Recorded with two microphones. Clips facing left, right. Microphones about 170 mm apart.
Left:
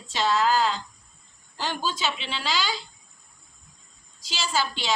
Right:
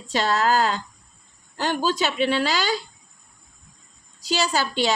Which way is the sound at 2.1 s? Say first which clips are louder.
Right 8 dB; 50° right (ahead or behind).